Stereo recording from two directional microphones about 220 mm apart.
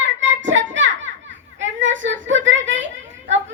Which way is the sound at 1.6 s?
60° right (ahead or behind).